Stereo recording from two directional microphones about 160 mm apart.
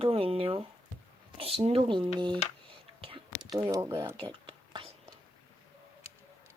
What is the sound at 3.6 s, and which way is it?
Speech, 15° right (ahead or behind).